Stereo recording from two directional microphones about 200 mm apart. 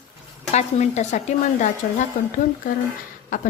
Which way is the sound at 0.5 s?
35° left (ahead or behind).